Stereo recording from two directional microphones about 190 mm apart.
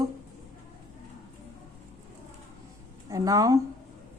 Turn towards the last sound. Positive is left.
turn(degrees=-20)  # may be behind; listen again after turning